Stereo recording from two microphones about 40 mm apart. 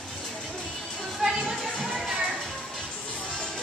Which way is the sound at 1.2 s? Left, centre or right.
Centre.